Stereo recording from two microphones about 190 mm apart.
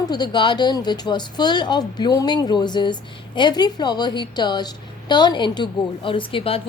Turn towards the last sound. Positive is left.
turn(degrees=30)  # may be behind; listen again after turning